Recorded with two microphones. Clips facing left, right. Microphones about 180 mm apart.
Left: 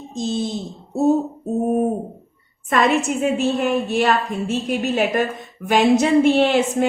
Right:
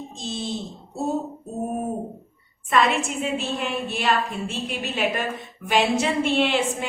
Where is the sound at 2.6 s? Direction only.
45° left (ahead or behind).